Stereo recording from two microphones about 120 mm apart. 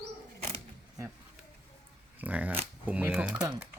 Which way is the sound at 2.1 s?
15° right (ahead or behind).